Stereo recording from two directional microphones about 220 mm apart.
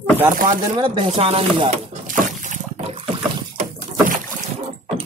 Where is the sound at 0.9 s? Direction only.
25° right (ahead or behind).